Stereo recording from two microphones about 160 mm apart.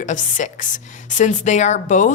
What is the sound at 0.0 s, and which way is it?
Speech, 50° left (ahead or behind).